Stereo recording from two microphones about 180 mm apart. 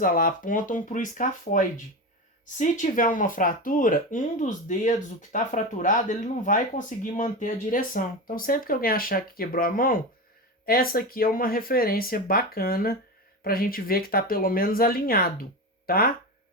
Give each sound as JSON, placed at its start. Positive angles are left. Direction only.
{"t": 0.0, "sound": "speech", "side_deg": 50}